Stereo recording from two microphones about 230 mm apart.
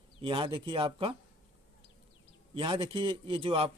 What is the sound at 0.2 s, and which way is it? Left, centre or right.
Speech, right.